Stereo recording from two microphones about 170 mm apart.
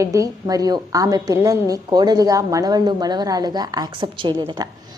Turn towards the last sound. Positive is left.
turn(degrees=-25)  # may be behind; listen again after turning